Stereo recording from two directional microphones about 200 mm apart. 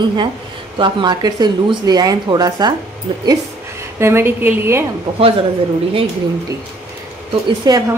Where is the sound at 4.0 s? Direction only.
10° right (ahead or behind).